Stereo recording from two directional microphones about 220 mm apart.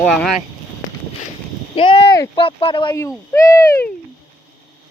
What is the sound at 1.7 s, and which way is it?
Speech, 25° left (ahead or behind).